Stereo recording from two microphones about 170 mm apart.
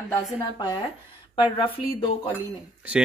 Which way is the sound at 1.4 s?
30° left (ahead or behind).